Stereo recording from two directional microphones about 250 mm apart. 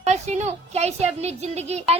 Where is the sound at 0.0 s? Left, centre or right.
Right.